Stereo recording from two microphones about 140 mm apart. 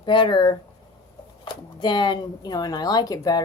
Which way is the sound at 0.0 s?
35° left (ahead or behind).